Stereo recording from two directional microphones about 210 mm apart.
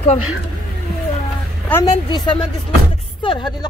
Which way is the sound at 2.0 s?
20° left (ahead or behind).